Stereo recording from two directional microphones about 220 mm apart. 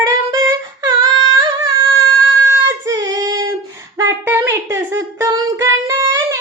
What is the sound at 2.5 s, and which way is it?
Child singing, 15° right (ahead or behind).